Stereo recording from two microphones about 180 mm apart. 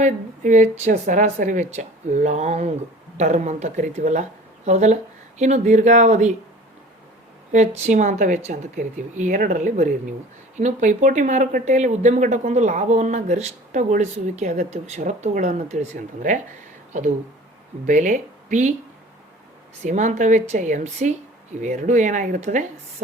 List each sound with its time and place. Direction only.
0.0 s speech: 45° right (ahead or behind)
7.9 s a woman's voice: 40° right (ahead or behind)
17.8 s a woman's voice: 45° right (ahead or behind)
19.8 s a woman's voice: 40° right (ahead or behind)